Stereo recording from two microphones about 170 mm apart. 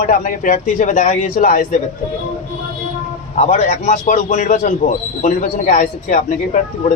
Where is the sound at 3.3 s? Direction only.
45° left (ahead or behind).